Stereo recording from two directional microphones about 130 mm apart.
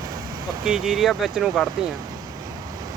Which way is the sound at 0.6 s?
5° right (ahead or behind).